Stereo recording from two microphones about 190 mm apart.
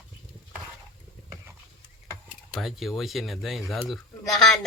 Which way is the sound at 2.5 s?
Centre (ahead or behind).